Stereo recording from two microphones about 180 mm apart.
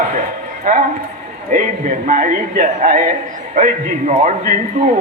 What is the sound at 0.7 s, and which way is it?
A man's voice, 50° right (ahead or behind).